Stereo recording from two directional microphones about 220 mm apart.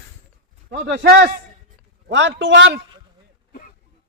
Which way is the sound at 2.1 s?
55° right (ahead or behind).